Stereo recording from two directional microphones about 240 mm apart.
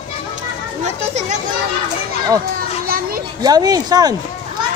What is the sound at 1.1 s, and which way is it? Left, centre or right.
Speech, right.